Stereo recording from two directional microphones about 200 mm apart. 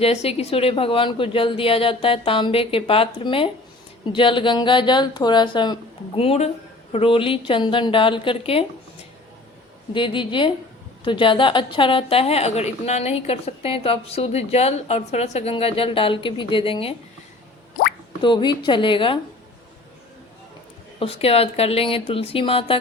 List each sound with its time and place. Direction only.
0.0 s a woman's voice: 30° left (ahead or behind)
9.9 s a woman's voice: 25° left (ahead or behind)
18.2 s a woman's voice: 25° left (ahead or behind)
21.0 s a woman's voice: 30° left (ahead or behind)